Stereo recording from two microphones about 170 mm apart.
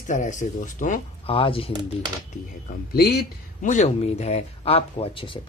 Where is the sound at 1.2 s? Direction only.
35° left (ahead or behind).